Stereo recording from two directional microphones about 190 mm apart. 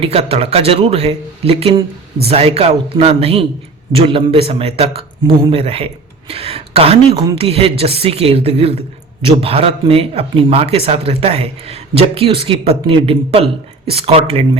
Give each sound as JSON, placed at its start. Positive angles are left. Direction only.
{"t": 0.0, "sound": "a man's voice", "side_deg": -30}